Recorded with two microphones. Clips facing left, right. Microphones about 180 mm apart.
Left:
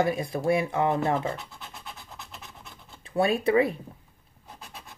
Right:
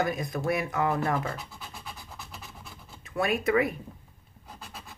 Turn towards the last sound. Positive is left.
turn(degrees=30)  # may be behind; listen again after turning